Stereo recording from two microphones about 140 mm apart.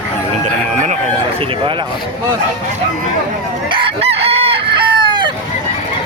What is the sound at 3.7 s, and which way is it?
Chicken, 40° right (ahead or behind).